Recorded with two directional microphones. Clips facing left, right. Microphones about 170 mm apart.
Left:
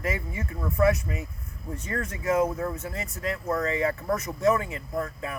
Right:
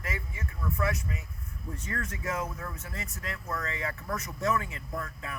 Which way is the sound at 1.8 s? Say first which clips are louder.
Left 7 dB; 20° left (ahead or behind).